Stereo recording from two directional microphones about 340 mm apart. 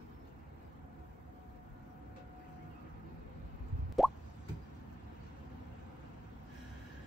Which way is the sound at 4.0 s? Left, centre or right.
Centre.